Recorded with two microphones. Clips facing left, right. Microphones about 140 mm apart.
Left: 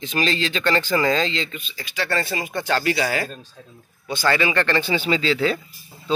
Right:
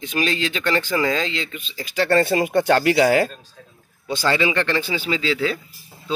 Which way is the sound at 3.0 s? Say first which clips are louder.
Right 7 dB; 20° right (ahead or behind).